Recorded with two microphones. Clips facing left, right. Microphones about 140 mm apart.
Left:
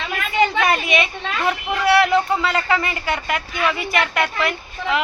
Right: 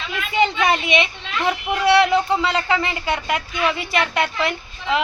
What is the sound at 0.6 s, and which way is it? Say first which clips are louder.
A woman's voice: even; 20° right (ahead or behind).